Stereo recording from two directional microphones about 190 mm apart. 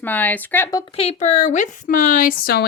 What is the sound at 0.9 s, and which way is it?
Speech, 35° left (ahead or behind).